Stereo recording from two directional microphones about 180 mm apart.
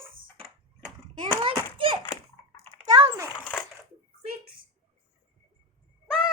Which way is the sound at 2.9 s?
20° right (ahead or behind).